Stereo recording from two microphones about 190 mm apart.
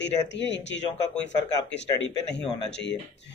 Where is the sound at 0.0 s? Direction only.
65° left (ahead or behind).